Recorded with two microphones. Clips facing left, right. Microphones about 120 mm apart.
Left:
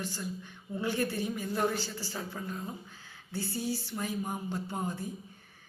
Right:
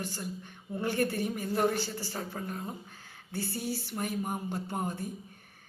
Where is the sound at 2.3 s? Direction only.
45° right (ahead or behind).